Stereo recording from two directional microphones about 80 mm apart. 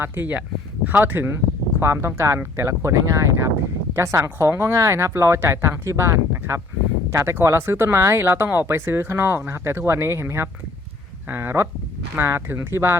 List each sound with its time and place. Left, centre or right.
0.0 s speech: right
1.8 s speech: right